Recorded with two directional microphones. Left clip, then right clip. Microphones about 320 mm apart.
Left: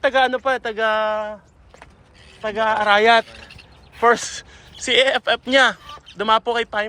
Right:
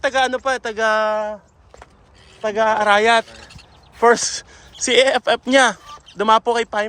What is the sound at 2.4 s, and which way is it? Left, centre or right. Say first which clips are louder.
Speech: right 2 dB; centre.